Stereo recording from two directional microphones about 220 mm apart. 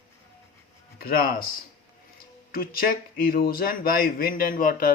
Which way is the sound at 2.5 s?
40° left (ahead or behind).